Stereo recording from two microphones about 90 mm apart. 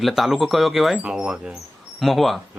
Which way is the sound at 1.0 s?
10° right (ahead or behind).